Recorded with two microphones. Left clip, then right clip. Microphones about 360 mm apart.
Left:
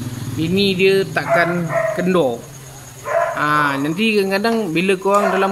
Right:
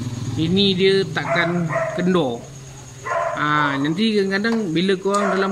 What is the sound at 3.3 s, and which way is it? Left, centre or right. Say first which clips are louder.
Speech: left 3 dB; centre.